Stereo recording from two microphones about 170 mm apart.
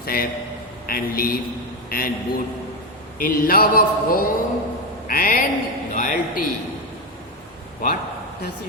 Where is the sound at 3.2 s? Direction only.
55° left (ahead or behind).